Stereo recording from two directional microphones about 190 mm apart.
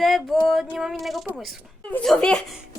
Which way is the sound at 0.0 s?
Centre (ahead or behind).